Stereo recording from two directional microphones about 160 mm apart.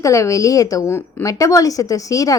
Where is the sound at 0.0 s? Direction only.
20° left (ahead or behind).